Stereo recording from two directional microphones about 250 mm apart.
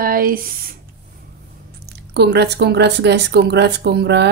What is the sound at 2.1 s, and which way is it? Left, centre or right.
Speech, right.